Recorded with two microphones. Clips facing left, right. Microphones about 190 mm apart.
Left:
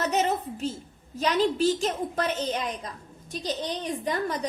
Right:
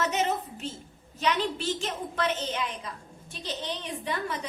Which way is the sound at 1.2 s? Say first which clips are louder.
Left 5 dB; 40° left (ahead or behind).